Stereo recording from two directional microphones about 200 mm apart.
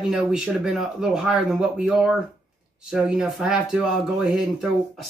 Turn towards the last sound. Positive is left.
turn(degrees=0)  # may be behind; listen again after turning